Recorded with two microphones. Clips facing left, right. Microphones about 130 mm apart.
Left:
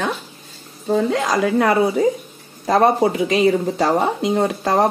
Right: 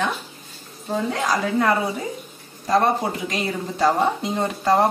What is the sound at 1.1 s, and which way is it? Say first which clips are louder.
A woman's voice: left 4 dB; 90° left.